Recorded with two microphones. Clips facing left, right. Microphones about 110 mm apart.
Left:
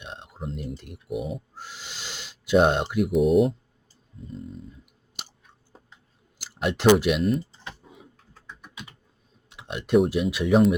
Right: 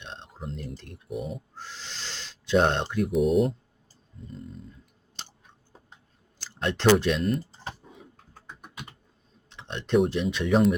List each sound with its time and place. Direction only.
0.0 s a sound: 15° left (ahead or behind)
0.3 s speech: 5° left (ahead or behind)
1.5 s owl: 15° left (ahead or behind)
3.1 s speech: centre (ahead or behind)
6.4 s speech: 10° left (ahead or behind)
8.3 s typing: 50° right (ahead or behind)
9.5 s speech: 10° left (ahead or behind)